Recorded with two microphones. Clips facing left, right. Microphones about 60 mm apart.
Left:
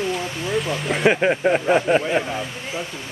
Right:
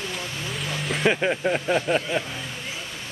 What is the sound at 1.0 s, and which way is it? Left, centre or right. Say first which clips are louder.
Speech: left 5 dB; left.